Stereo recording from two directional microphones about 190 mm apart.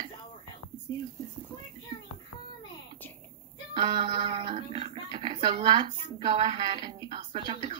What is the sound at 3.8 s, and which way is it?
A woman's voice, 25° right (ahead or behind).